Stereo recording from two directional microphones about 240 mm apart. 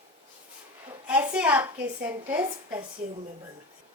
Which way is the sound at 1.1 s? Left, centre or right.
Centre.